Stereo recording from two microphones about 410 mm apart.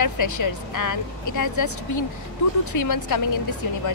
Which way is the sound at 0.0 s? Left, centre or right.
Left.